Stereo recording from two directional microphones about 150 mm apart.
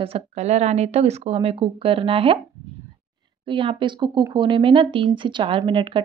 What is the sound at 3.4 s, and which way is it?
Speech, 35° right (ahead or behind).